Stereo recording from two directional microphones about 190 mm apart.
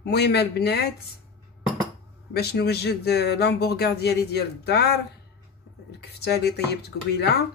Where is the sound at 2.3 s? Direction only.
55° left (ahead or behind).